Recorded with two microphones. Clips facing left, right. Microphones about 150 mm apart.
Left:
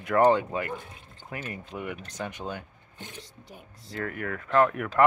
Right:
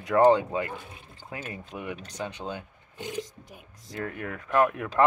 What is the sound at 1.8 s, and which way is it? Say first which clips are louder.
Speech: even; 15° right (ahead or behind).